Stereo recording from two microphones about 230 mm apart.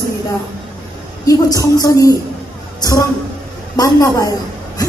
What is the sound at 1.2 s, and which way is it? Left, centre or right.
A woman's voice, centre.